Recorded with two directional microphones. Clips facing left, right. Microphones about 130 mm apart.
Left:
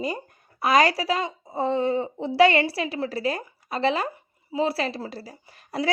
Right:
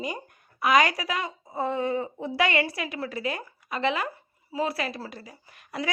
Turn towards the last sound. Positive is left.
turn(degrees=35)  # may be behind; listen again after turning